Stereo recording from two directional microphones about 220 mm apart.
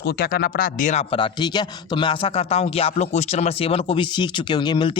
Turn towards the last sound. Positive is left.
turn(degrees=20)  # may be behind; listen again after turning